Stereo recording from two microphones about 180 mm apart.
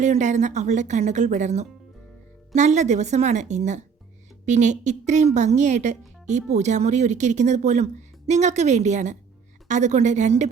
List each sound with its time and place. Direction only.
0.0 s speech: 40° right (ahead or behind)